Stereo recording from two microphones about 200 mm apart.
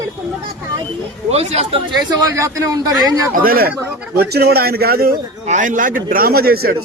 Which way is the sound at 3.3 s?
45° right (ahead or behind).